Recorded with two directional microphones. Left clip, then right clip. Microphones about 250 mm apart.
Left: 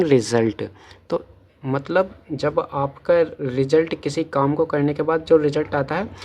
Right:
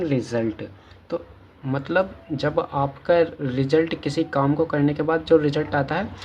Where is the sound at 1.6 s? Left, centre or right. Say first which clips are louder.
Left 2 dB; left.